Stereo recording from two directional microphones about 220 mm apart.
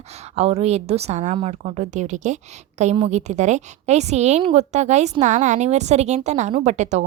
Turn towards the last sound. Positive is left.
turn(degrees=-30)  # may be behind; listen again after turning